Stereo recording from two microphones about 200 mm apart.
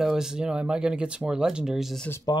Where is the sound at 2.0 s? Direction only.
15° left (ahead or behind).